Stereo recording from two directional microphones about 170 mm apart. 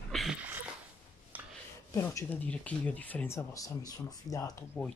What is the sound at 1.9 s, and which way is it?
Speech, 15° left (ahead or behind).